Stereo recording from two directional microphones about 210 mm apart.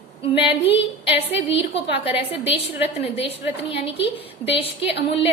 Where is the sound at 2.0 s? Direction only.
25° left (ahead or behind).